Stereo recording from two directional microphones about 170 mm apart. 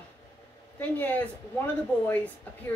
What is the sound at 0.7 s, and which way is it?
Speech, 10° left (ahead or behind).